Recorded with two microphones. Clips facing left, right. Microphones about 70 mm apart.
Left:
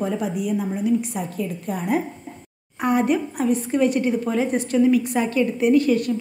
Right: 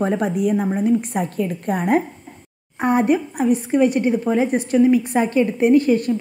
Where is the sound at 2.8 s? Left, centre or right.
Right.